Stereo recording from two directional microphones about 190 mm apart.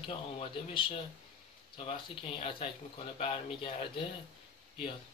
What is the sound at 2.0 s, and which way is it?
Speech, 25° left (ahead or behind).